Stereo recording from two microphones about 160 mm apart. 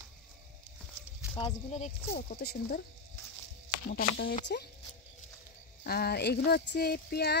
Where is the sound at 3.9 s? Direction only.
70° left (ahead or behind).